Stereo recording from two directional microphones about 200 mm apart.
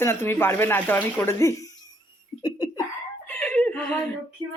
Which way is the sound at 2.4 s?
25° left (ahead or behind).